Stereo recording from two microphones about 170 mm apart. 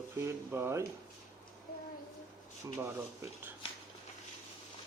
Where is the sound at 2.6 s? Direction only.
15° right (ahead or behind).